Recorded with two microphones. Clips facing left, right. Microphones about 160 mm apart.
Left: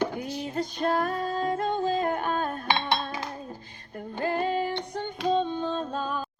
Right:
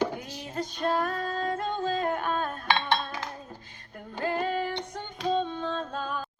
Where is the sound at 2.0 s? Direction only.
35° left (ahead or behind).